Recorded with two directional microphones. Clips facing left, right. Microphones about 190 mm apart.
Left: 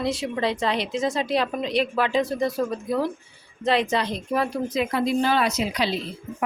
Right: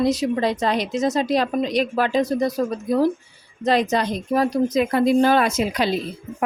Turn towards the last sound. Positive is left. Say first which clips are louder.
# right 4 dB
turn(degrees=-50)  # may be behind; listen again after turning